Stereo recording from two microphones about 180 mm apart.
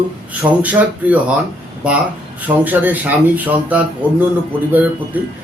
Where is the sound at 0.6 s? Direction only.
10° right (ahead or behind).